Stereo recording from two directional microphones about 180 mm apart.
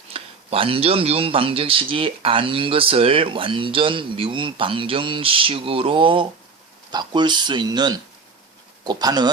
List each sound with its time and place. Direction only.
0.1 s speech: 30° right (ahead or behind)